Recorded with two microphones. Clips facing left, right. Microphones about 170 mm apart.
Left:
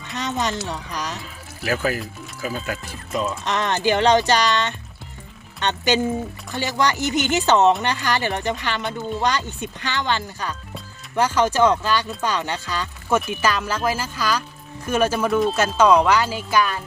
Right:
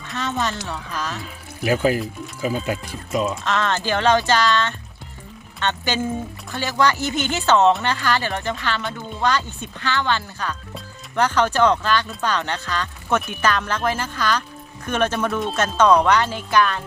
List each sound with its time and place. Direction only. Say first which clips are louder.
0.1 s speech: even; 15° left (ahead or behind)
1.6 s speech: right 4 dB; 20° right (ahead or behind)
3.4 s speech: left 1 dB; 15° left (ahead or behind)